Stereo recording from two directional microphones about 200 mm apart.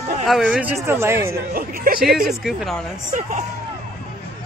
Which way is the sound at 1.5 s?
45° right (ahead or behind).